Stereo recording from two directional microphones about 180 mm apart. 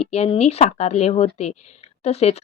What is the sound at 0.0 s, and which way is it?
Speech, 35° left (ahead or behind).